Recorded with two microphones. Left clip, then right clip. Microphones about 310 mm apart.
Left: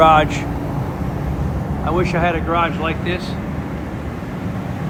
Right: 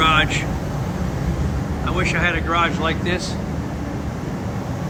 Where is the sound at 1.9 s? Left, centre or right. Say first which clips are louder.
Left 2 dB; centre.